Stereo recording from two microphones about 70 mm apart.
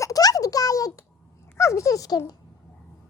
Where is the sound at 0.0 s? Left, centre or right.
Left.